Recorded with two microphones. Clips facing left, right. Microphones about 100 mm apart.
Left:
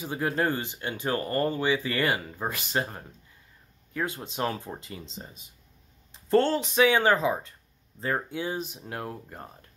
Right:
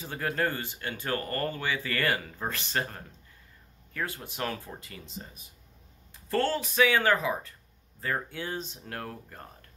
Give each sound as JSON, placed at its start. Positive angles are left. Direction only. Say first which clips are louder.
{"t": 0.0, "sound": "speech", "louder": "left 3 dB", "side_deg": 15}